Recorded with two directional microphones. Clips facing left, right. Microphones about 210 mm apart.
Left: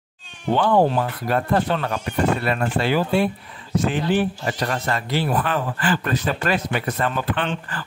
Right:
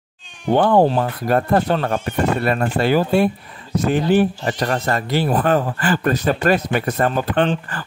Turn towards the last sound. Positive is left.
turn(degrees=-45)  # may be behind; listen again after turning